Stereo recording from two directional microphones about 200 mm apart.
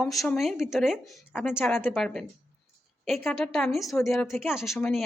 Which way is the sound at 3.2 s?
Centre (ahead or behind).